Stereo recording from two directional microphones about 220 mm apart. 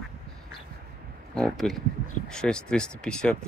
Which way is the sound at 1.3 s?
Centre (ahead or behind).